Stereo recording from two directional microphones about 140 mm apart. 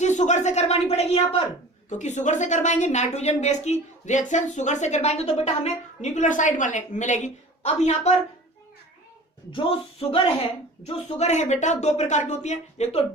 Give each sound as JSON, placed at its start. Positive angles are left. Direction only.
{"t": 0.0, "sound": "speech", "side_deg": 60}
{"t": 1.9, "sound": "a woman's voice", "side_deg": 60}
{"t": 6.0, "sound": "a woman's voice", "side_deg": 60}
{"t": 9.5, "sound": "a woman's voice", "side_deg": 40}